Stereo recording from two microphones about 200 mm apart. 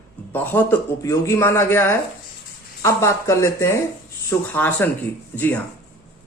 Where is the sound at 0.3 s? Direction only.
10° left (ahead or behind).